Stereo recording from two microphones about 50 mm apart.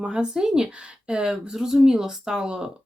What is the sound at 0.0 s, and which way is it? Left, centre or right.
Speech, centre.